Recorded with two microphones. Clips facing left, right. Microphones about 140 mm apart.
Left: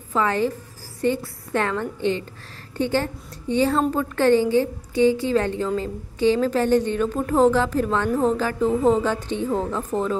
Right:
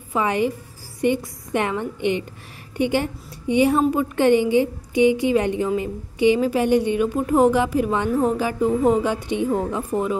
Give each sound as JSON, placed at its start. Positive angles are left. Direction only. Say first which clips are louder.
{"t": 0.1, "sound": "a woman's voice", "louder": "right 1 dB", "side_deg": -15}